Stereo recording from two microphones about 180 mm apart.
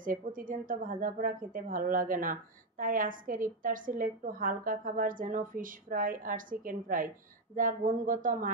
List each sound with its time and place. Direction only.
0.0 s a woman's voice: 50° right (ahead or behind)